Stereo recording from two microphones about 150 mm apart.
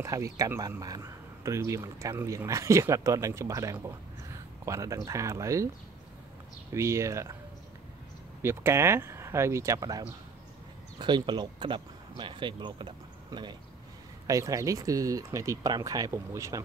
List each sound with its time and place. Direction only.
0.0 s speech: 20° right (ahead or behind)
6.7 s speech: 20° right (ahead or behind)
8.4 s speech: 15° right (ahead or behind)